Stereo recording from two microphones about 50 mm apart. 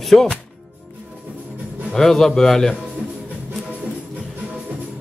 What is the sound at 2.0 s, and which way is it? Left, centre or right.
Speech, centre.